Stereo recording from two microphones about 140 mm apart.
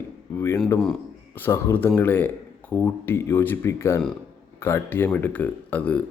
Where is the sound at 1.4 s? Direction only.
20° left (ahead or behind).